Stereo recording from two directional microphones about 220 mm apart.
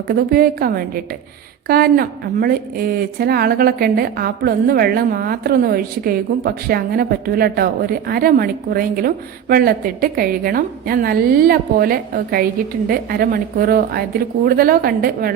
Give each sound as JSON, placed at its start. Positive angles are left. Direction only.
{"t": 0.1, "sound": "a woman's voice", "side_deg": -40}